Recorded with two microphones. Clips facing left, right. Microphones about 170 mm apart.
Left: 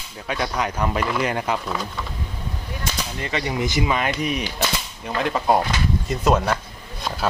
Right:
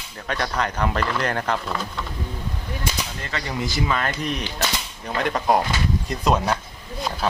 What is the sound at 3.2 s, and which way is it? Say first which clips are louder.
Speech: left 5 dB; 20° left (ahead or behind).